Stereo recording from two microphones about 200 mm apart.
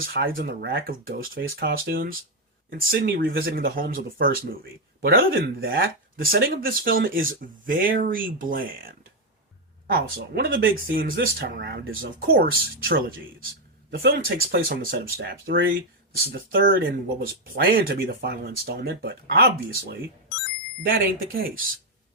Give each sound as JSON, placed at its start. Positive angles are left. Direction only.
{"t": 0.0, "sound": "speech", "side_deg": -50}
{"t": 1.4, "sound": "speech", "side_deg": -65}